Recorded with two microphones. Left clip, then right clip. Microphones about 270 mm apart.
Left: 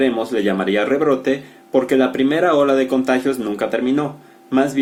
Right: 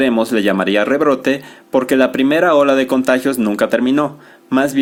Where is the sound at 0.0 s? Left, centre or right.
Right.